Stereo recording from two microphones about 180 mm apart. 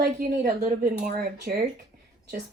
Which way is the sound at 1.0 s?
45° right (ahead or behind).